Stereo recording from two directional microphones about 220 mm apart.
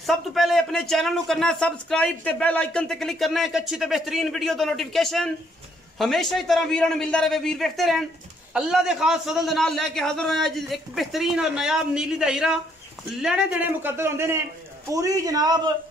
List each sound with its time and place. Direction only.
0.0 s a man's voice: centre (ahead or behind); by 15.7 s 20° right (ahead or behind)